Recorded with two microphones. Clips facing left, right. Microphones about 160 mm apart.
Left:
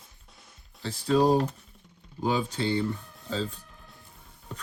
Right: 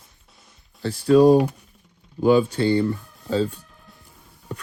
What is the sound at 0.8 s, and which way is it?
Speech, 65° right (ahead or behind).